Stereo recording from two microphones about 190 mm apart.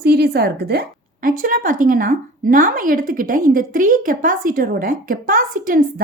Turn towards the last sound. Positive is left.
turn(degrees=-45)  # may be behind; listen again after turning